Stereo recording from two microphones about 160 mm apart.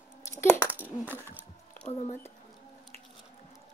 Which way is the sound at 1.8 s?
40° left (ahead or behind).